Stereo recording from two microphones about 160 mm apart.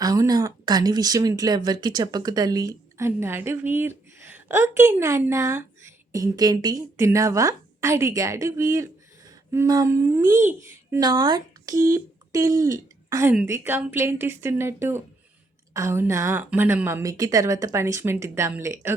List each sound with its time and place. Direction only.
0.0 s a woman's voice: 25° right (ahead or behind)